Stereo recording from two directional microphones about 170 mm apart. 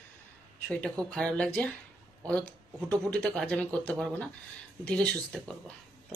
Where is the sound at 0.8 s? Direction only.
5° left (ahead or behind).